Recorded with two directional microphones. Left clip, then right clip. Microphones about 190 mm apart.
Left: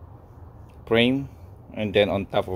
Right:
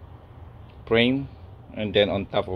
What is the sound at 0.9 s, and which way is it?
Speech, 25° left (ahead or behind).